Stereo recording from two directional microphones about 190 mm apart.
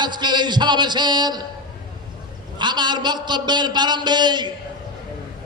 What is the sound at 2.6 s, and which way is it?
A man's voice, 25° right (ahead or behind).